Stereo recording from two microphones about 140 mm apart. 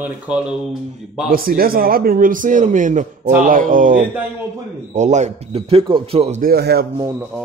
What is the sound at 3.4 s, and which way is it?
Speech, 75° right (ahead or behind).